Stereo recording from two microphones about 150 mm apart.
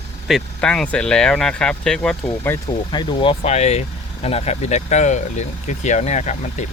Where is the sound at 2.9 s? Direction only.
30° left (ahead or behind).